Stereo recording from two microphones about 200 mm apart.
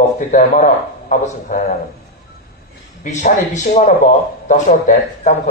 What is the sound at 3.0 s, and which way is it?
A man's voice, 35° left (ahead or behind).